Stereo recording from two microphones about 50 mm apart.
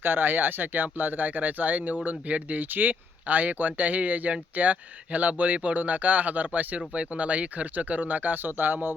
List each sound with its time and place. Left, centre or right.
0.0 s speech: right